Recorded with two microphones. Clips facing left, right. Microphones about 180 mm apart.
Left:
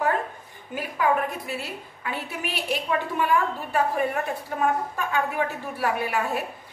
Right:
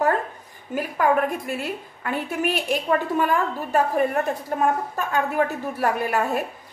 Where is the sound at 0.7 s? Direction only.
50° right (ahead or behind).